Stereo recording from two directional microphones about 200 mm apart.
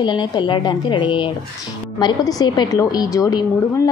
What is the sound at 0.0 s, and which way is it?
A woman's voice, 25° left (ahead or behind).